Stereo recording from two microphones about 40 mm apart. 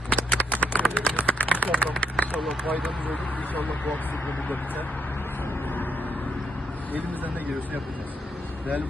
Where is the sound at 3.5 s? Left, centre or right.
Left.